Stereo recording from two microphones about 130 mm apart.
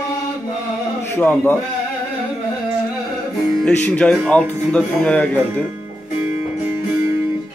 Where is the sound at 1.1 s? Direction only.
15° left (ahead or behind).